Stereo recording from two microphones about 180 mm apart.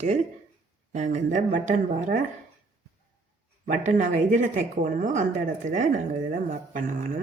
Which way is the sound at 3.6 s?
45° right (ahead or behind).